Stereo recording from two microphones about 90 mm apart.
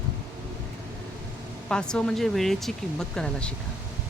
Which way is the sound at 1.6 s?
10° left (ahead or behind).